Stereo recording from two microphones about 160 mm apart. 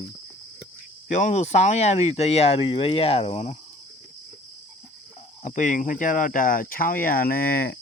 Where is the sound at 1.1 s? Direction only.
45° left (ahead or behind).